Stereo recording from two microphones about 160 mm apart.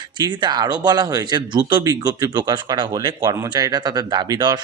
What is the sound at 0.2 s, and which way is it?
Speech, 25° right (ahead or behind).